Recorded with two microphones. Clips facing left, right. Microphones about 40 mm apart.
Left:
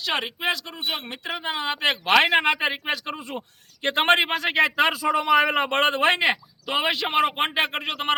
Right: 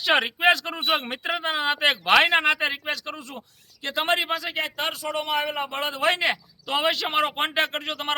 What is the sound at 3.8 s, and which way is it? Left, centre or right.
Speech, left.